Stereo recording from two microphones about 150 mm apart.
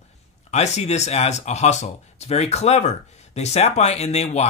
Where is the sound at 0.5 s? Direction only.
50° left (ahead or behind).